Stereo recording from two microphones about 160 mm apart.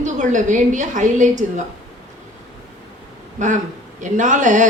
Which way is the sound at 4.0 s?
50° right (ahead or behind).